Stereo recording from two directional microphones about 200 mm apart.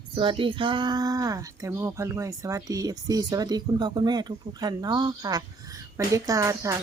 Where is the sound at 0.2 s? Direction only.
25° right (ahead or behind).